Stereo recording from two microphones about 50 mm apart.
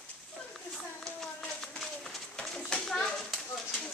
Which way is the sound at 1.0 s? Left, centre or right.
Centre.